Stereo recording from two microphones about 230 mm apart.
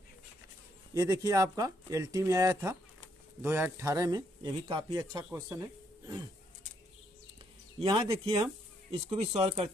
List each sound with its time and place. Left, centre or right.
0.9 s speech: centre
7.8 s speech: right